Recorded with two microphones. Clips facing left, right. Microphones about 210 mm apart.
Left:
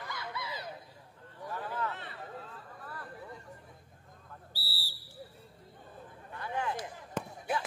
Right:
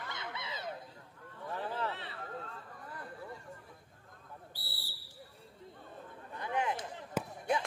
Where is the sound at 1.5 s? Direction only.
30° right (ahead or behind).